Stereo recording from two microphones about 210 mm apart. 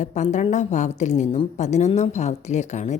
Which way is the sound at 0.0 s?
35° left (ahead or behind).